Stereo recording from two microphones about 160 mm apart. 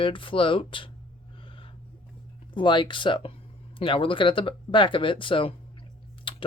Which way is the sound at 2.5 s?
30° left (ahead or behind).